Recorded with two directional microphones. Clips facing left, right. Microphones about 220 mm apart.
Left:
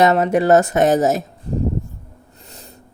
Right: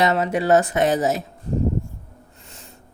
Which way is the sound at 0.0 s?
45° left (ahead or behind).